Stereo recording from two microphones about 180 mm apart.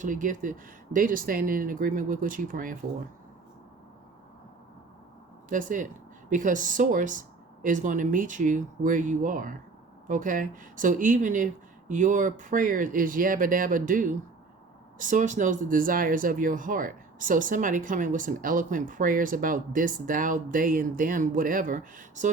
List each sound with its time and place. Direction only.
0.0 s speech: 45° right (ahead or behind)
5.5 s speech: 45° right (ahead or behind)